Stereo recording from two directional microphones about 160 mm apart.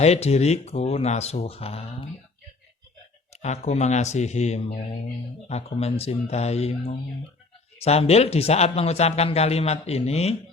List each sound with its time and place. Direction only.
0.0 s a man's voice: 40° left (ahead or behind)
3.4 s a man's voice: 45° left (ahead or behind)